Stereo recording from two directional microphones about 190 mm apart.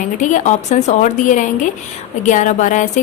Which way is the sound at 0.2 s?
40° left (ahead or behind).